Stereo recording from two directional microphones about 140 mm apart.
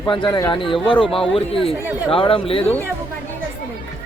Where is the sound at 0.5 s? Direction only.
35° left (ahead or behind).